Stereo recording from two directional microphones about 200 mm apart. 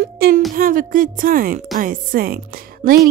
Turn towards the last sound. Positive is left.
turn(degrees=-50)  # may be behind; listen again after turning